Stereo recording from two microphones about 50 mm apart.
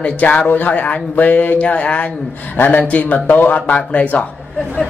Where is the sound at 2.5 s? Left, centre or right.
Left.